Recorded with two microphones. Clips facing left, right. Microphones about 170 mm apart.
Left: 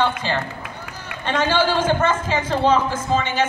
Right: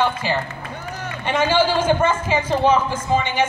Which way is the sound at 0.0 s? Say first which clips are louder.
Right 1 dB; 10° right (ahead or behind).